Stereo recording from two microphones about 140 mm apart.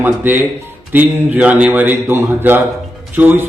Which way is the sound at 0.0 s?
15° right (ahead or behind).